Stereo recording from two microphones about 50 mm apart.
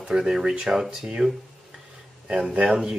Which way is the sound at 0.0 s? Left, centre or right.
Centre.